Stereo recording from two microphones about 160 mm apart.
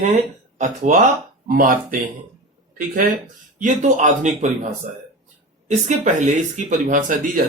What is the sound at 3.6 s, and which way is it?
Speech, 50° right (ahead or behind).